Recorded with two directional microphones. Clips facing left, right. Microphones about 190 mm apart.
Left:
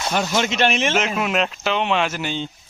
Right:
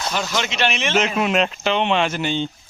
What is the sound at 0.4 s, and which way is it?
Speech, 45° left (ahead or behind).